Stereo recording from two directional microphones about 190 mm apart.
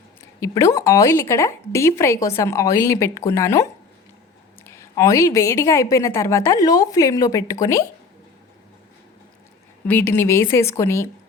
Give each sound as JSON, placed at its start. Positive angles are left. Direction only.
{"t": 0.3, "sound": "speech", "side_deg": 15}
{"t": 9.8, "sound": "speech", "side_deg": 10}